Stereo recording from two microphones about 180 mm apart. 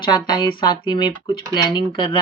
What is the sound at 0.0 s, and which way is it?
Speech, 25° left (ahead or behind).